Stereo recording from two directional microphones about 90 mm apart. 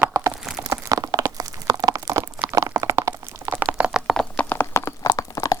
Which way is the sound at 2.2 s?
30° right (ahead or behind).